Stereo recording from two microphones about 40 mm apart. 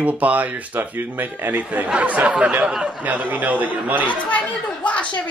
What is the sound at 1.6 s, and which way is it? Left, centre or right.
Speech, right.